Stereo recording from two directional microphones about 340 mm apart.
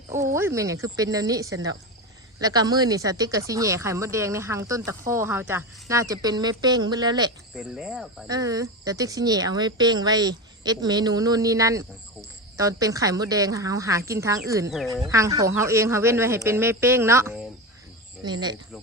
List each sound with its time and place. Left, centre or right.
0.1 s speech: centre
7.5 s speech: centre